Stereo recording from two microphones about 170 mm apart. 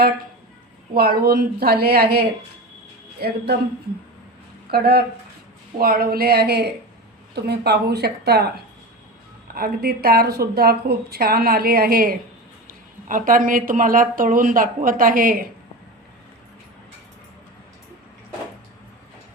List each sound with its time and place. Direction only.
0.9 s a woman's voice: 65° right (ahead or behind)
4.7 s a woman's voice: 65° right (ahead or behind)
9.6 s a woman's voice: 65° right (ahead or behind)